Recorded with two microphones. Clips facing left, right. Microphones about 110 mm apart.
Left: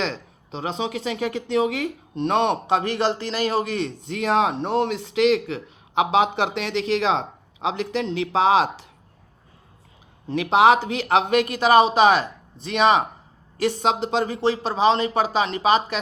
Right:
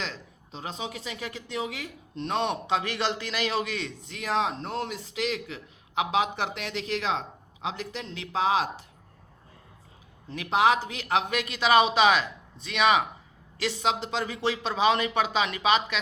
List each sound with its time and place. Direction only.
0.0 s speech: 65° left (ahead or behind)
10.2 s speech: 65° left (ahead or behind); by 16.0 s 40° left (ahead or behind)